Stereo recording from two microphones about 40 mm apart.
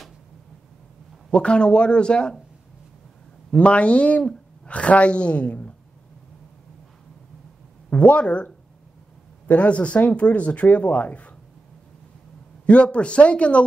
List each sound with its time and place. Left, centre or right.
1.3 s speech: left
3.5 s speech: left
7.9 s speech: left
9.5 s speech: left
12.6 s speech: left